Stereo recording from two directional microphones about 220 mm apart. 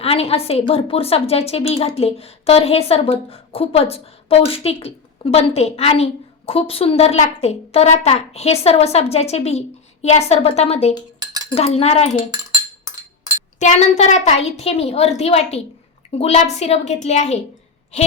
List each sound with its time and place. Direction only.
0.0 s a woman's voice: 25° left (ahead or behind)
11.2 s cutlery: 15° right (ahead or behind)
11.4 s a woman's voice: 30° left (ahead or behind)
13.6 s a woman's voice: 30° left (ahead or behind)